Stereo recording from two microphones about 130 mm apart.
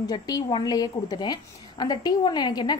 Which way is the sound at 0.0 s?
30° left (ahead or behind).